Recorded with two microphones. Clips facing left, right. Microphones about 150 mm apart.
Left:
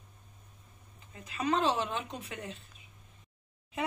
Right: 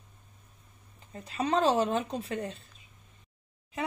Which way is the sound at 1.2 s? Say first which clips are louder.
Right 3 dB; 35° right (ahead or behind).